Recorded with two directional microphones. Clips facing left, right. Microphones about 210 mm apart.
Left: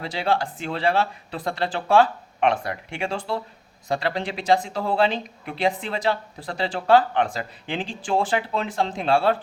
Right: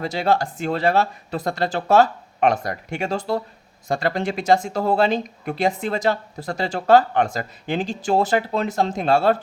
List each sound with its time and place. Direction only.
0.0 s speech: 45° right (ahead or behind)